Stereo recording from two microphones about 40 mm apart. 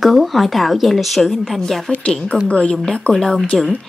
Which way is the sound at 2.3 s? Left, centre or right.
Left.